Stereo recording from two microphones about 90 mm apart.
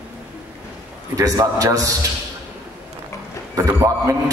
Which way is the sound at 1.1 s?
40° right (ahead or behind).